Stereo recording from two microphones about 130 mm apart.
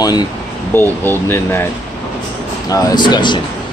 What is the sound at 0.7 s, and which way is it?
Speech, 15° left (ahead or behind).